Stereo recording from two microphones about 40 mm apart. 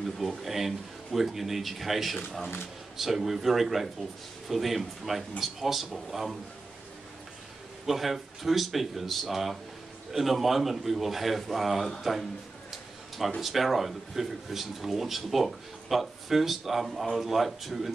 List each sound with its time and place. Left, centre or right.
0.4 s speech: centre
7.8 s speech: centre
13.4 s speech: centre